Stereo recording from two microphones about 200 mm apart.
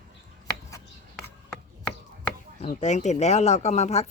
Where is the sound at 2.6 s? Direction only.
35° left (ahead or behind).